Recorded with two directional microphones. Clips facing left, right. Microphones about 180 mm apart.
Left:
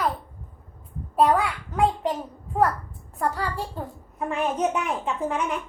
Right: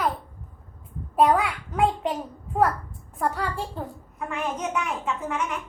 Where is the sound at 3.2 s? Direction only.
Centre (ahead or behind).